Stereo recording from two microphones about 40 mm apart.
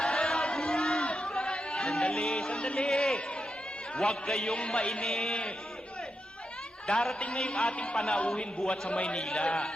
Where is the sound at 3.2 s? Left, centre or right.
Left.